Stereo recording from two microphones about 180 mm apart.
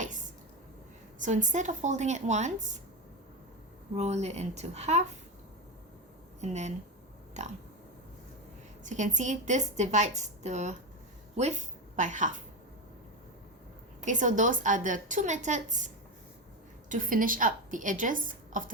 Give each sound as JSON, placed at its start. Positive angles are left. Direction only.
{"t": 0.0, "sound": "a sound", "side_deg": -45}
{"t": 1.2, "sound": "a woman's voice", "side_deg": -45}
{"t": 3.9, "sound": "a woman's voice", "side_deg": -40}
{"t": 6.4, "sound": "a woman's voice", "side_deg": -40}
{"t": 8.8, "sound": "a woman's voice", "side_deg": -45}
{"t": 11.9, "sound": "a woman's voice", "side_deg": -45}
{"t": 14.0, "sound": "a woman's voice", "side_deg": -45}
{"t": 16.9, "sound": "a woman's voice", "side_deg": -50}